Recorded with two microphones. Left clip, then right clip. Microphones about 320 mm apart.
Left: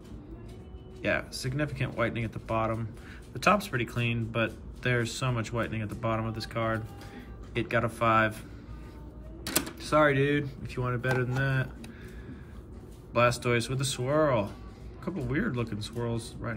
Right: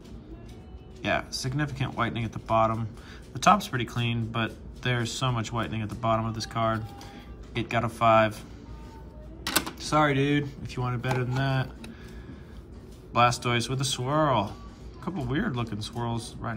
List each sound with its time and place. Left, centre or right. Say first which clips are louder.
1.0 s speech: right 2 dB; centre
9.7 s speech: left 2 dB; centre
13.1 s speech: right 2 dB; centre